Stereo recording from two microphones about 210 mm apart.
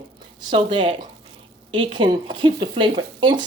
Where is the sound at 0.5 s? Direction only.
25° right (ahead or behind).